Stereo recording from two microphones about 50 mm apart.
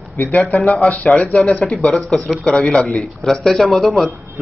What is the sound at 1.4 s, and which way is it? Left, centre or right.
Speech, centre.